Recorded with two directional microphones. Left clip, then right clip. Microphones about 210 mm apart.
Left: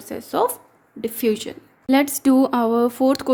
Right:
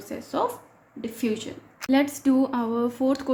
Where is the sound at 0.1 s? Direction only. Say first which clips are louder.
Left 6 dB; 50° left (ahead or behind).